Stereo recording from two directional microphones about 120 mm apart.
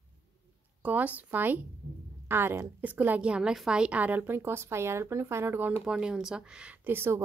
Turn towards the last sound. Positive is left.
turn(degrees=-20)  # may be behind; listen again after turning